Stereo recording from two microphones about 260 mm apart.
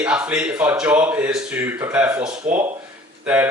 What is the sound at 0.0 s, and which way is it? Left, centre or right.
Speech, centre.